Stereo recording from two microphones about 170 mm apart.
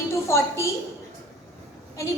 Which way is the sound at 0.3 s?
15° left (ahead or behind).